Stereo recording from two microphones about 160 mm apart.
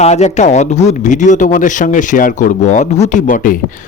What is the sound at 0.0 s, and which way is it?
A man's voice, 45° left (ahead or behind).